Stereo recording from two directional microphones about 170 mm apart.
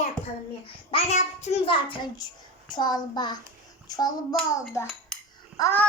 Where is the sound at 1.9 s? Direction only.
25° left (ahead or behind).